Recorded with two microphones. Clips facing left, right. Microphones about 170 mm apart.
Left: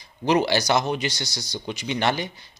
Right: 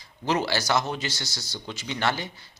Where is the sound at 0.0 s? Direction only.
15° left (ahead or behind).